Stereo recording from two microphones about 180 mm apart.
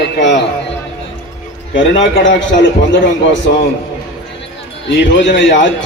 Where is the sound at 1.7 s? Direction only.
90° left.